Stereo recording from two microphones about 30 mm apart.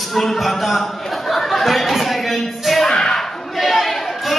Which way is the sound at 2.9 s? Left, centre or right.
Left.